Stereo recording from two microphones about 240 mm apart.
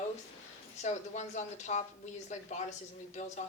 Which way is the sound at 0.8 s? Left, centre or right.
Left.